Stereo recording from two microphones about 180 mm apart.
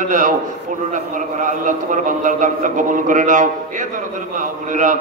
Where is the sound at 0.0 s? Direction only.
45° right (ahead or behind).